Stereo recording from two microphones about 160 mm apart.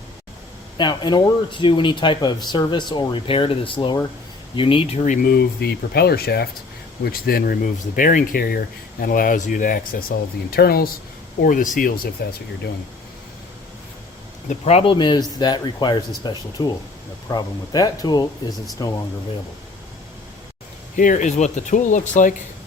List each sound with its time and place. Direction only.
0.8 s speech: 30° left (ahead or behind); by 10.9 s 70° left (ahead or behind)
11.4 s speech: 55° left (ahead or behind)
14.5 s speech: 40° left (ahead or behind)
14.9 s speech: 30° left (ahead or behind)
20.9 s speech: 55° left (ahead or behind)